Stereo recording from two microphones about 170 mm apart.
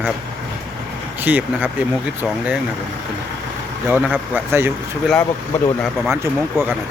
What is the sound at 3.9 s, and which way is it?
Speech, 10° right (ahead or behind).